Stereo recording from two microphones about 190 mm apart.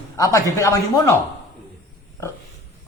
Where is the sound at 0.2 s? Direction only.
15° left (ahead or behind).